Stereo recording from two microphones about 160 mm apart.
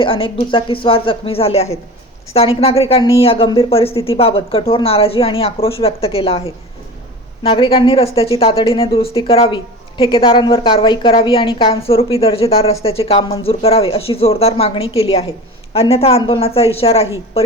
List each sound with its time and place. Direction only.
0.0 s speech: 35° left (ahead or behind)